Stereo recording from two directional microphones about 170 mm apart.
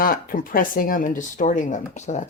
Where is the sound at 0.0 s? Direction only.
60° left (ahead or behind).